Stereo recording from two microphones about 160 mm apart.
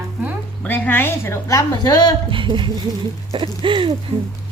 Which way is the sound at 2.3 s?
30° right (ahead or behind).